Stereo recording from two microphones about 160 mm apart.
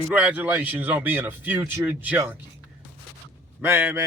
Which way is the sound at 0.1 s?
10° right (ahead or behind).